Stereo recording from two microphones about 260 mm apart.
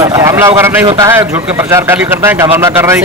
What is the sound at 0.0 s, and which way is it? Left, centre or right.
Speech, centre.